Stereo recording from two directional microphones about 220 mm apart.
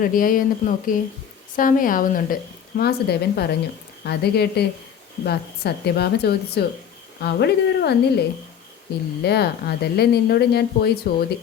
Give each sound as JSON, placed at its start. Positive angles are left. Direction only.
{"t": 0.0, "sound": "a woman's voice", "side_deg": 40}
{"t": 9.2, "sound": "speech", "side_deg": 45}